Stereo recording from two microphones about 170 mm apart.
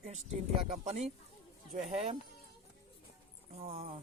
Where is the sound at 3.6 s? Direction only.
35° right (ahead or behind).